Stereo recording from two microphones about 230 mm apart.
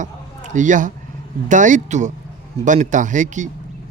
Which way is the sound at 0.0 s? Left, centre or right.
Right.